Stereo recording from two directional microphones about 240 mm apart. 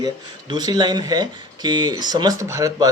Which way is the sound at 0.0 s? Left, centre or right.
Centre.